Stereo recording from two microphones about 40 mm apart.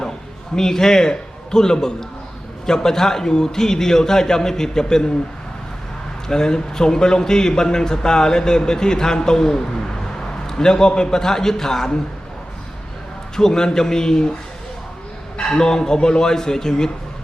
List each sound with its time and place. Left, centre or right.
0.5 s a man's voice: centre
6.2 s a man's voice: centre
13.3 s a man's voice: centre
15.4 s a man's voice: centre